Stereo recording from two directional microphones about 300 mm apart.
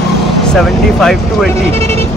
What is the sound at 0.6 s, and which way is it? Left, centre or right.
Speech, centre.